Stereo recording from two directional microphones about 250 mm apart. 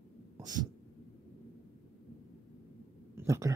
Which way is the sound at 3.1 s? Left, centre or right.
Centre.